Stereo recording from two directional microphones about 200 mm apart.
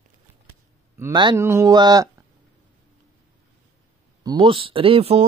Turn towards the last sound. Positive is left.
turn(degrees=-30)  # may be behind; listen again after turning